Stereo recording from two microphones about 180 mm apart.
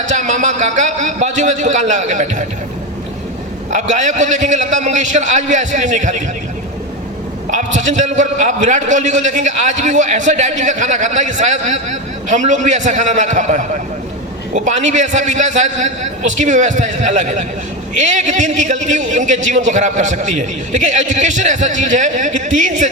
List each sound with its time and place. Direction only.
0.0 s a man's voice: 40° right (ahead or behind)
3.7 s a man's voice: 40° right (ahead or behind)
7.5 s a man's voice: 40° right (ahead or behind)